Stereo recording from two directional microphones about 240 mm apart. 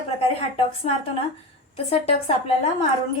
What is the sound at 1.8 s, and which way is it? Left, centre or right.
Speech, left.